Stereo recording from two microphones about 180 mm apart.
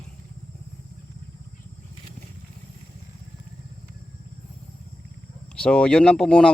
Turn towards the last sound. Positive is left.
turn(degrees=5)  # may be behind; listen again after turning